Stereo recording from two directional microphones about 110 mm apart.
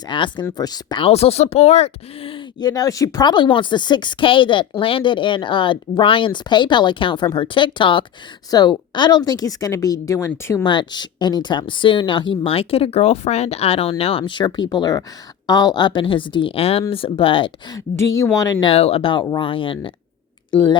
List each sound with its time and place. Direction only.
0.1 s a woman's voice: 45° left (ahead or behind)
1.0 s speech: 65° left (ahead or behind)
2.6 s a woman's voice: 35° left (ahead or behind)
3.2 s speech: 45° left (ahead or behind)
8.4 s a woman's voice: 35° left (ahead or behind)
10.6 s a woman's voice: 45° left (ahead or behind)
17.7 s a woman's voice: 30° left (ahead or behind)
18.6 s speech: 65° left (ahead or behind)